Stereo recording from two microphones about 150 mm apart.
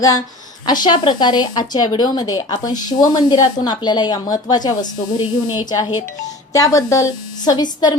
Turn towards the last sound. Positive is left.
turn(degrees=25)  # may be behind; listen again after turning